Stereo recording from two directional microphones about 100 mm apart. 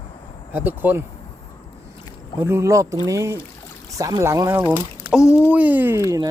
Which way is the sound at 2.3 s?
25° right (ahead or behind).